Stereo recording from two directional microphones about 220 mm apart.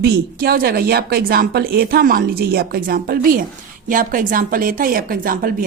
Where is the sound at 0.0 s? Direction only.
45° right (ahead or behind).